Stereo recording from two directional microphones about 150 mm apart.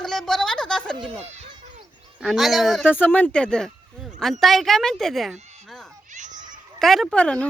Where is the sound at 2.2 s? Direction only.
Centre (ahead or behind).